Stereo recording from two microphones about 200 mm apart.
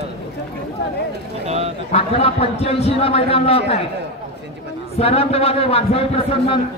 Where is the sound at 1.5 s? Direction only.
30° right (ahead or behind).